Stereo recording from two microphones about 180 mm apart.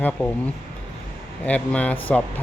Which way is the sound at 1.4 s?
5° left (ahead or behind).